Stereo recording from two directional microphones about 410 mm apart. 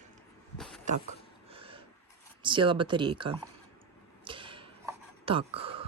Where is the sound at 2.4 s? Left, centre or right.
Centre.